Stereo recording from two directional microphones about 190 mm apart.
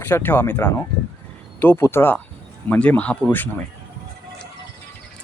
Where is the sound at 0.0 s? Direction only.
10° left (ahead or behind).